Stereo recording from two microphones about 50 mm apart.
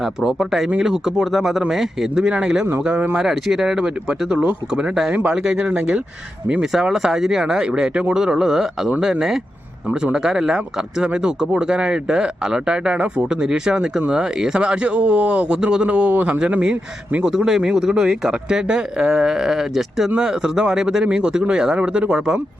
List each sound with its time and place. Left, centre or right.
0.0 s a man's voice: centre; by 6.0 s right
6.6 s a man's voice: centre; by 16.4 s right
17.2 s speech: centre